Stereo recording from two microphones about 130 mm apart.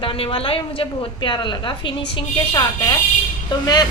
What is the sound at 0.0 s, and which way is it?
A woman's voice, 45° left (ahead or behind).